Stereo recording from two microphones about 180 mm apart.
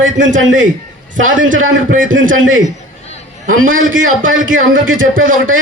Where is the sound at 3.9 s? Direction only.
90° right.